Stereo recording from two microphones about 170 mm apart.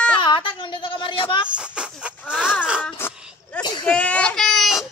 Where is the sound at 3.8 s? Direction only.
5° left (ahead or behind).